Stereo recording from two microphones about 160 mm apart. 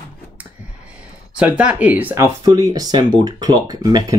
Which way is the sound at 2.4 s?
20° right (ahead or behind).